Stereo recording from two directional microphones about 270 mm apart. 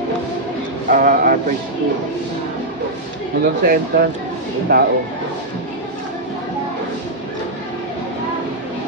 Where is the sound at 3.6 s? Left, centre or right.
Right.